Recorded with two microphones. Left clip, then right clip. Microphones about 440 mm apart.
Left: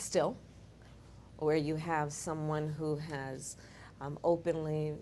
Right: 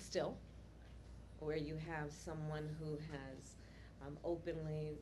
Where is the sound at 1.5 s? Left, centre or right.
Left.